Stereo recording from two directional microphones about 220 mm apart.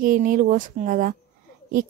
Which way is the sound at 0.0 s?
40° right (ahead or behind).